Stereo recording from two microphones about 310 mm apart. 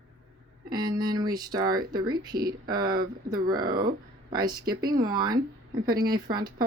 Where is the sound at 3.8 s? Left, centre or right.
Right.